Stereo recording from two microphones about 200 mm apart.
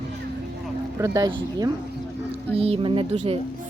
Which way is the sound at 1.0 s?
15° right (ahead or behind).